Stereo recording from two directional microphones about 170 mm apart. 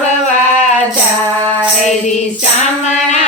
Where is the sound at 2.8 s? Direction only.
45° left (ahead or behind).